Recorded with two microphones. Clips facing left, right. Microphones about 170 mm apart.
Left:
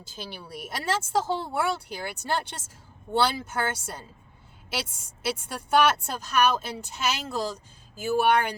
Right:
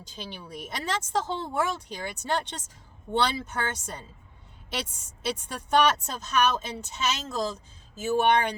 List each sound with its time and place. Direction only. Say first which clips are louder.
0.1 s a woman's voice: left 1 dB; 10° left (ahead or behind)